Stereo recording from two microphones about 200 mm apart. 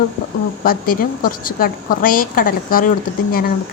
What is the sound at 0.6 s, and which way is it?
A woman's voice, 45° left (ahead or behind).